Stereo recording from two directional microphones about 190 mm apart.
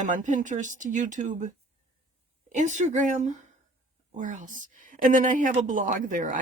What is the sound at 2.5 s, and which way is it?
A woman's voice, 40° right (ahead or behind).